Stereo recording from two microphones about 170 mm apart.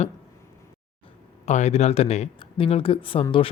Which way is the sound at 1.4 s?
40° left (ahead or behind).